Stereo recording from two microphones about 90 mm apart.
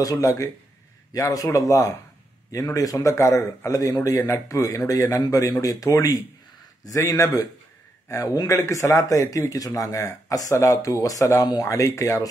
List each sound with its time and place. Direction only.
0.0 s speech: 40° left (ahead or behind)